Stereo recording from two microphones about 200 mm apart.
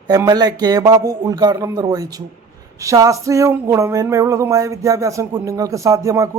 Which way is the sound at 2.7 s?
15° right (ahead or behind).